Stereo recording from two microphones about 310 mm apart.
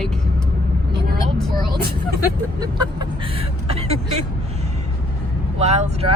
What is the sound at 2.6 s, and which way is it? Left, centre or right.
Speech, centre.